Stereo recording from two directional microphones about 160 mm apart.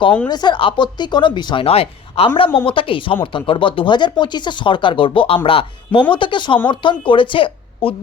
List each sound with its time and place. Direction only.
0.3 s speech: 25° left (ahead or behind)